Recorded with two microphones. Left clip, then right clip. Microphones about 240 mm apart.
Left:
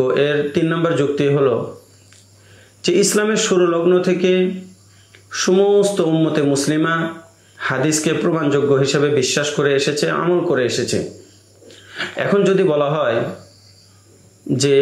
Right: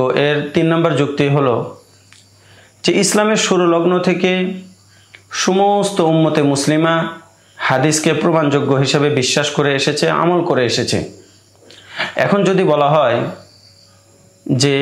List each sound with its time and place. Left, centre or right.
0.0 s a man's voice: right
2.8 s a man's voice: right